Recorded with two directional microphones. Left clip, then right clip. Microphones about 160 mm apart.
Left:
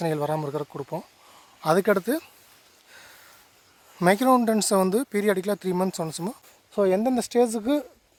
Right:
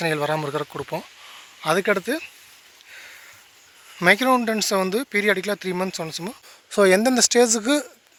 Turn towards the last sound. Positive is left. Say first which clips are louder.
# right 4 dB
turn(degrees=10)  # may be behind; listen again after turning